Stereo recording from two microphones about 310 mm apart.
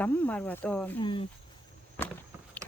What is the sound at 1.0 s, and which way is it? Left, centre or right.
Speech, centre.